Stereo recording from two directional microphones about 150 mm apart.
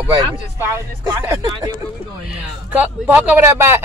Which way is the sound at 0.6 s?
20° right (ahead or behind).